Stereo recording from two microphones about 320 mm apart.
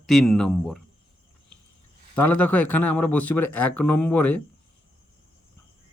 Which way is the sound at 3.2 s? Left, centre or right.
Left.